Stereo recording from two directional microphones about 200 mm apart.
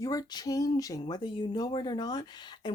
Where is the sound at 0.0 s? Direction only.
20° left (ahead or behind).